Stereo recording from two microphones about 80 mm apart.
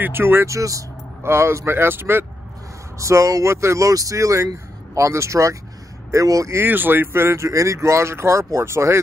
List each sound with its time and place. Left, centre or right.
0.0 s speech: right
0.6 s speech: right
1.2 s speech: right
3.0 s speech: right
6.6 s speech: right